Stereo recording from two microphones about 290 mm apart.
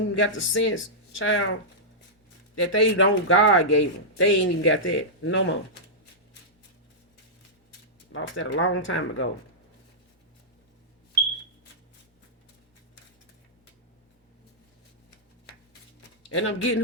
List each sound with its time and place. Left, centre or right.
0.1 s speech: left
2.6 s speech: left
8.1 s speech: left
16.3 s speech: left